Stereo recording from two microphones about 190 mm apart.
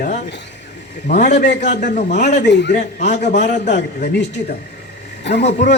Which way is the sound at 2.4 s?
65° left (ahead or behind).